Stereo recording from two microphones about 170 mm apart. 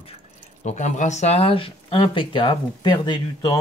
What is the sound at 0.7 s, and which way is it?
Speech, 45° left (ahead or behind).